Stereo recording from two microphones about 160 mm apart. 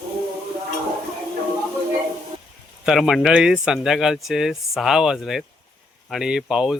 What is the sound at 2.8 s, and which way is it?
Speech, centre (ahead or behind).